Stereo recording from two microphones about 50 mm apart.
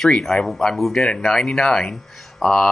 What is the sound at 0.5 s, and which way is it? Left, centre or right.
Speech, centre.